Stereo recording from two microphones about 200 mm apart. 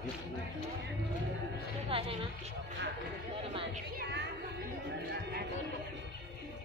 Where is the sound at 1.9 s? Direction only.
30° right (ahead or behind).